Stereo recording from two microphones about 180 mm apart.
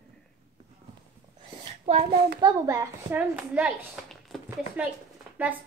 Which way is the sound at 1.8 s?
35° right (ahead or behind).